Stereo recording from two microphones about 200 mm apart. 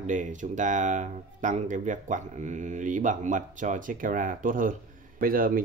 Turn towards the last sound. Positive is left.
turn(degrees=-45)  # may be behind; listen again after turning